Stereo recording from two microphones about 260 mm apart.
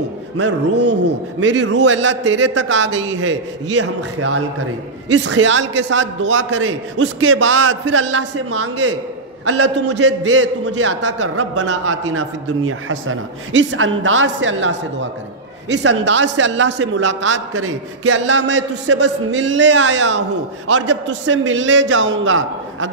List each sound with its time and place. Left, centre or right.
0.7 s a man's voice: right
11.3 s a man's voice: right
15.7 s a man's voice: right
16.0 s a man's voice: right